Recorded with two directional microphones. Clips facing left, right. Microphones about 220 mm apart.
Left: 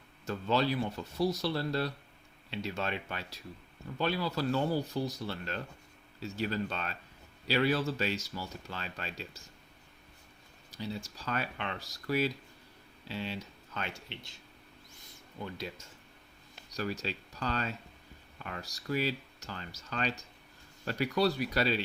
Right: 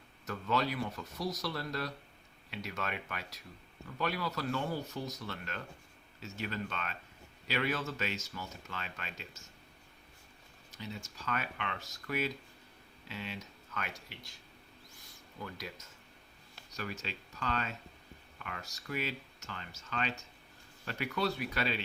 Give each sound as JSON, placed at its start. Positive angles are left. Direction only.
{"t": 0.3, "sound": "speech", "side_deg": 30}
{"t": 10.7, "sound": "speech", "side_deg": 35}
{"t": 15.4, "sound": "speech", "side_deg": 25}